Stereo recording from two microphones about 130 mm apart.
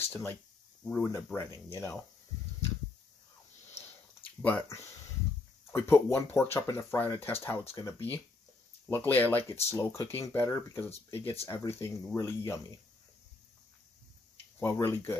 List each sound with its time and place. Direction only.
0.0 s speech: 20° left (ahead or behind)
4.2 s a sound: 10° left (ahead or behind)
5.7 s speech: 20° left (ahead or behind)
7.8 s speech: 30° left (ahead or behind)
8.8 s speech: 15° left (ahead or behind)
14.6 s speech: 20° left (ahead or behind)